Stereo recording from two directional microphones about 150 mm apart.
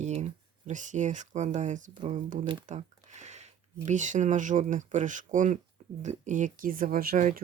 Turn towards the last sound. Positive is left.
turn(degrees=-70)  # may be behind; listen again after turning